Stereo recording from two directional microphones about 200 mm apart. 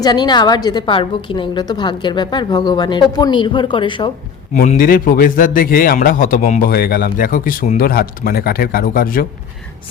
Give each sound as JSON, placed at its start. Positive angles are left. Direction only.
{"t": 0.0, "sound": "a woman's voice", "side_deg": 20}
{"t": 4.5, "sound": "a man's voice", "side_deg": 40}